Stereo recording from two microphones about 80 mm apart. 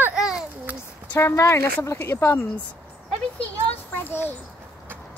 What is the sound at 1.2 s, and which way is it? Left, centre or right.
A woman's voice, left.